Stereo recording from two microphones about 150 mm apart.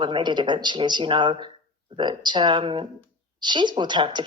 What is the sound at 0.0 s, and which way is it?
A woman's voice, 30° right (ahead or behind).